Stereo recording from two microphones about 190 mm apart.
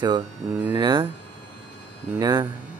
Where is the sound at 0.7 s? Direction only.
25° right (ahead or behind).